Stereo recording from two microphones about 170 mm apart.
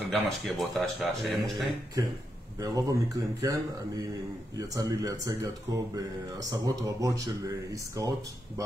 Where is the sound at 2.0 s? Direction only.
20° right (ahead or behind).